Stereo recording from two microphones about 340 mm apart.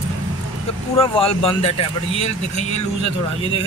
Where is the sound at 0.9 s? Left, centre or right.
Centre.